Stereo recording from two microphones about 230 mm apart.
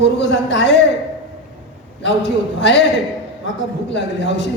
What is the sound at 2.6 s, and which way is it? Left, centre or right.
Speech, left.